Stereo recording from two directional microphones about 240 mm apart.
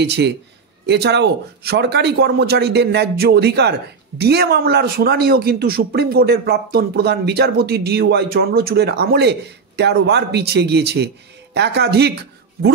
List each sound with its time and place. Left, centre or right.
0.0 s a man's voice: right